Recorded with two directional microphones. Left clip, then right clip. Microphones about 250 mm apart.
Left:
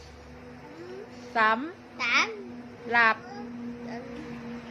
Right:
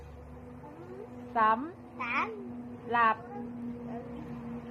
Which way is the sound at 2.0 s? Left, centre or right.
Centre.